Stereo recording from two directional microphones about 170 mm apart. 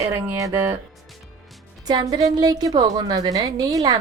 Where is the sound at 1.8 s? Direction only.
25° right (ahead or behind).